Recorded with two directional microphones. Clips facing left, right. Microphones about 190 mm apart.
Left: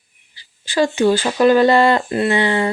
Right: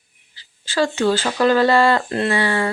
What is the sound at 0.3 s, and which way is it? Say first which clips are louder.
Speech: left 2 dB; 15° left (ahead or behind).